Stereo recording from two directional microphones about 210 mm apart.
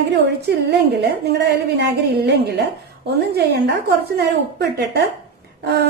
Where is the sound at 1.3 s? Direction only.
50° right (ahead or behind).